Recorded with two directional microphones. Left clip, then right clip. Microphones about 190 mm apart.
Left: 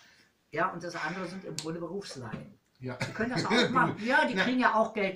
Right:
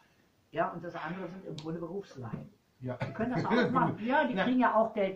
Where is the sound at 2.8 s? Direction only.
5° left (ahead or behind).